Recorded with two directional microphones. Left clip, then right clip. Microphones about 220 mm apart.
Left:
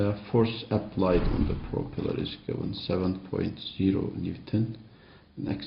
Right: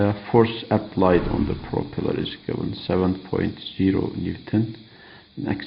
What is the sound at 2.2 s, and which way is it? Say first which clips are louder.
A man's voice: right 6 dB; 40° right (ahead or behind).